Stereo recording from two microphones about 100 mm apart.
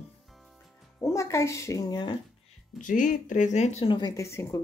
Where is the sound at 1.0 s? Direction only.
30° left (ahead or behind).